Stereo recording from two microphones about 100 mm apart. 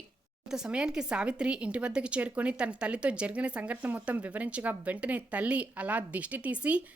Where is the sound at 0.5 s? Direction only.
10° right (ahead or behind).